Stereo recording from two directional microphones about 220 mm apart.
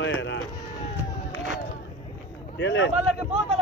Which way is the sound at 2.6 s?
55° left (ahead or behind).